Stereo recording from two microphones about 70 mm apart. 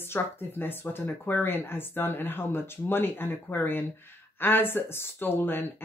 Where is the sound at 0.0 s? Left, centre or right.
Left.